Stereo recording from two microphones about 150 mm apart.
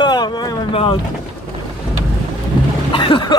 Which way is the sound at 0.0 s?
30° left (ahead or behind).